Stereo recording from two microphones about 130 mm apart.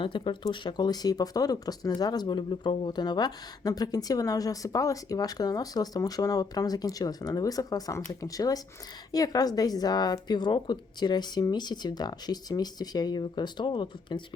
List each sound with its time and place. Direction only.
0.0 s a woman's voice: 40° left (ahead or behind)